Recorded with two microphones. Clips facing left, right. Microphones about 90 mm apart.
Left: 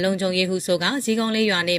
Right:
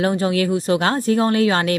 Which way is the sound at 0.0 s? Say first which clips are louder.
Right 3 dB; 35° right (ahead or behind).